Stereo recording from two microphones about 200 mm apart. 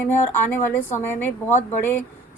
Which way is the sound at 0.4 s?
10° left (ahead or behind).